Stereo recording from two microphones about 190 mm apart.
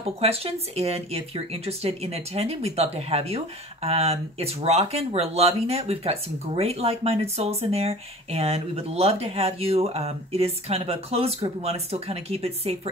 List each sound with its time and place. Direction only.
0.0 s speech: 30° right (ahead or behind)